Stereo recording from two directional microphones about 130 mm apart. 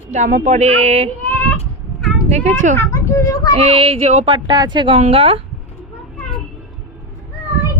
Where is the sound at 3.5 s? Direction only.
50° right (ahead or behind).